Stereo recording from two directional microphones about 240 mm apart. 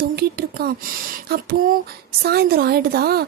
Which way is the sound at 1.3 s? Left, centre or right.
Right.